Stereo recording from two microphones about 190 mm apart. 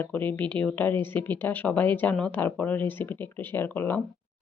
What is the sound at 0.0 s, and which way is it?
Speech, 10° left (ahead or behind).